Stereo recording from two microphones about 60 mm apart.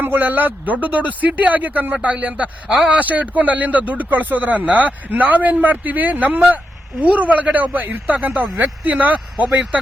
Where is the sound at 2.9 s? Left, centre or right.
Right.